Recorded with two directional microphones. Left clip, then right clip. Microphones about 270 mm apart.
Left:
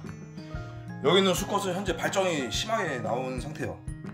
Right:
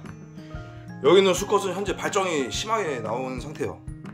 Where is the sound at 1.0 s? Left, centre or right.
Centre.